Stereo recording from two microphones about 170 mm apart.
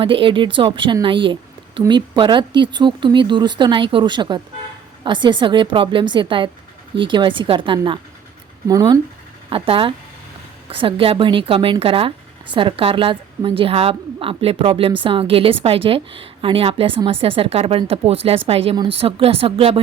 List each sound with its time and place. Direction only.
0.0 s a woman's voice: 30° right (ahead or behind)
9.5 s speech: 30° right (ahead or behind)